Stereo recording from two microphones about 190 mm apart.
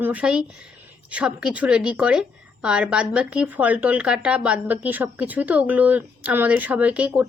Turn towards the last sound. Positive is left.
turn(degrees=-5)  # may be behind; listen again after turning